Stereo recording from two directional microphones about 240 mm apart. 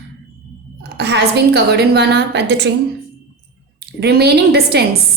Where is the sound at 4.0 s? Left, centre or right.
Right.